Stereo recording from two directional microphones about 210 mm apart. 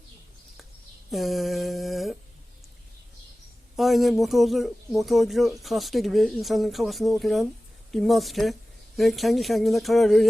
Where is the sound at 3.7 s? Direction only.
Centre (ahead or behind).